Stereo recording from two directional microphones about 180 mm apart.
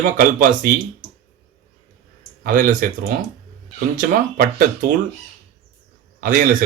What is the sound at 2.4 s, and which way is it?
Speech, 50° right (ahead or behind).